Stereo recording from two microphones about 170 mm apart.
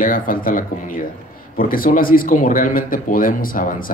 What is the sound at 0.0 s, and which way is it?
Speech, 55° left (ahead or behind).